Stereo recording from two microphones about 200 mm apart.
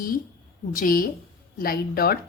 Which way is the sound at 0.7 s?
45° left (ahead or behind).